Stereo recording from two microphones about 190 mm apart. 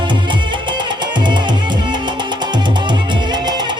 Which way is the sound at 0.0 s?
25° right (ahead or behind).